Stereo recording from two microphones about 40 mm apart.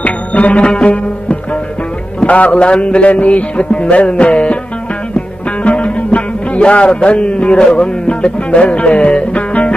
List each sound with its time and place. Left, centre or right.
0.0 s music: left
2.2 s music: left
5.6 s music: left